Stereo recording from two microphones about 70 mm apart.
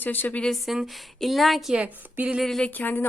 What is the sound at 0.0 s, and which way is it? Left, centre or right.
Speech, left.